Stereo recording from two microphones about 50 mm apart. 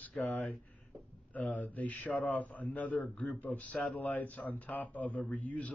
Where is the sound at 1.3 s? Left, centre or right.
Left.